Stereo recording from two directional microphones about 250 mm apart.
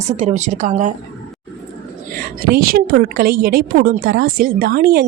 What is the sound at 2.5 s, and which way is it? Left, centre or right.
A woman's voice, right.